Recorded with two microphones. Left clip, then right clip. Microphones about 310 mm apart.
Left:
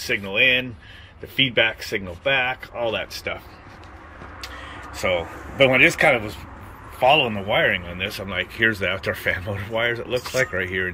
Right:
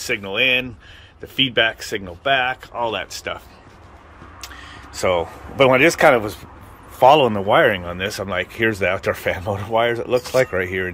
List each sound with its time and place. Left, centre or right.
0.0 s speech: centre
4.6 s a sound: centre
5.7 s speech: centre
7.3 s speech: centre